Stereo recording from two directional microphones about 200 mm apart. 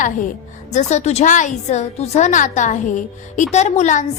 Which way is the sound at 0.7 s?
35° left (ahead or behind).